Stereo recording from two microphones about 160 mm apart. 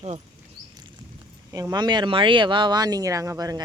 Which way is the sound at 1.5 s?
25° right (ahead or behind).